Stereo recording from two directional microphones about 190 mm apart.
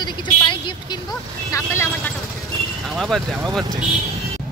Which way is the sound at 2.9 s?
Centre (ahead or behind).